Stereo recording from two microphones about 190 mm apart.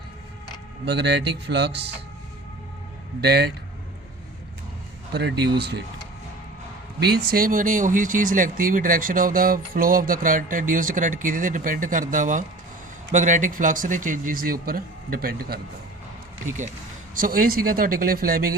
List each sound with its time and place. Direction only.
0.9 s speech: 60° right (ahead or behind)
3.2 s speech: 60° right (ahead or behind)
5.1 s speech: 60° right (ahead or behind)
7.0 s speech: 55° right (ahead or behind)
17.2 s speech: 45° right (ahead or behind)